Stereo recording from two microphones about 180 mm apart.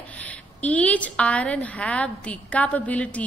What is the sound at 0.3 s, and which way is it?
A woman's voice, 10° left (ahead or behind).